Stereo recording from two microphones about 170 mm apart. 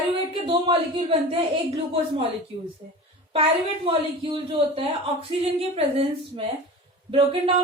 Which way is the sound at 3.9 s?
30° right (ahead or behind).